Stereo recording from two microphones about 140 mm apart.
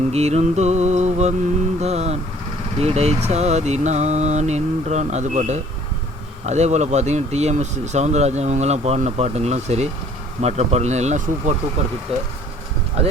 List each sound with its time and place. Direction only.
0.1 s speech: 50° right (ahead or behind)